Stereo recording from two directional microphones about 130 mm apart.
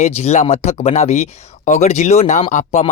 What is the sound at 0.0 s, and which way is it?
Speech, 60° left (ahead or behind).